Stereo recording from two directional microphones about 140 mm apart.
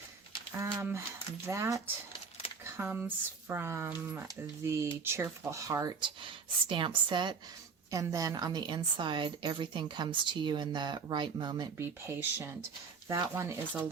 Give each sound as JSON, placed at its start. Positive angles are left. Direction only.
{"t": 0.5, "sound": "speech", "side_deg": -20}
{"t": 6.0, "sound": "a woman's voice", "side_deg": -35}
{"t": 11.8, "sound": "speech", "side_deg": -20}